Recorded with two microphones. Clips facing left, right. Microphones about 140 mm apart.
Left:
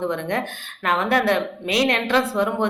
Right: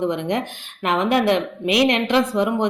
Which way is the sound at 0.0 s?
15° right (ahead or behind).